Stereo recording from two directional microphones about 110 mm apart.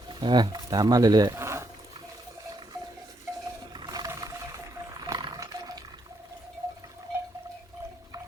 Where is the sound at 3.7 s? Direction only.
40° right (ahead or behind).